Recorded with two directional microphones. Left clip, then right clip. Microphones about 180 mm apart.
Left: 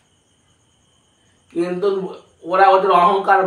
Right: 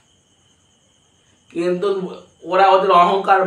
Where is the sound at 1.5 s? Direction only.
15° right (ahead or behind).